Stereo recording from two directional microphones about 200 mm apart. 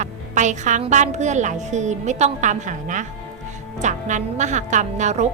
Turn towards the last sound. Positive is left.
turn(degrees=-35)  # may be behind; listen again after turning